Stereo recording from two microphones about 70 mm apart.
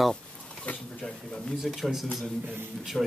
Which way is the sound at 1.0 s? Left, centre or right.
Centre.